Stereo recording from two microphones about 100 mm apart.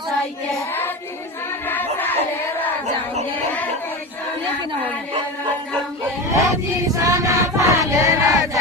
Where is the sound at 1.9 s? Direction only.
20° left (ahead or behind).